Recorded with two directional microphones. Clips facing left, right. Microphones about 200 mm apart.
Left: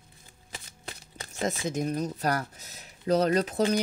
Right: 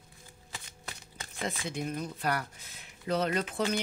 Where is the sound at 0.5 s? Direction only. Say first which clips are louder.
Left 3 dB; 25° left (ahead or behind).